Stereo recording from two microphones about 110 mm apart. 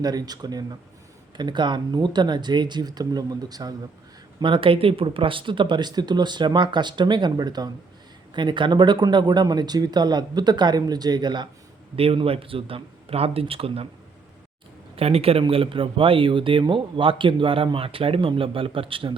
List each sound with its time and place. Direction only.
0.0 s speech: 35° right (ahead or behind)
4.4 s speech: 50° right (ahead or behind)
11.9 s speech: 60° right (ahead or behind)
14.9 s speech: 65° right (ahead or behind)